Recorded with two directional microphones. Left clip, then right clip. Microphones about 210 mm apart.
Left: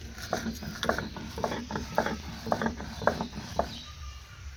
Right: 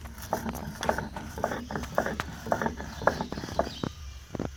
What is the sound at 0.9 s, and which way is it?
Mechanisms, 25° right (ahead or behind).